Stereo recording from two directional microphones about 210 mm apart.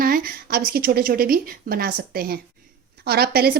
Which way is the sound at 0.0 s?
45° right (ahead or behind).